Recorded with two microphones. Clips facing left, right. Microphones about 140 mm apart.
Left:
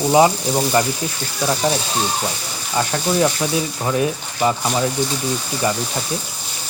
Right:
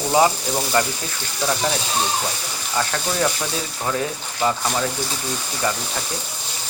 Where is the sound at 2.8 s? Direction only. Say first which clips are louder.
Left 4 dB; 15° left (ahead or behind).